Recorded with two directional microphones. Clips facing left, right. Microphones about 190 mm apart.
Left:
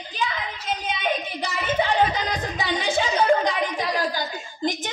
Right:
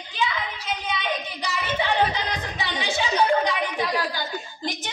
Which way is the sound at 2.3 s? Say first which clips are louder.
Left 4 dB; 50° left (ahead or behind).